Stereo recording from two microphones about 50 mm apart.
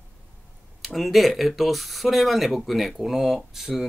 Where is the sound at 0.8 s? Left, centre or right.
Centre.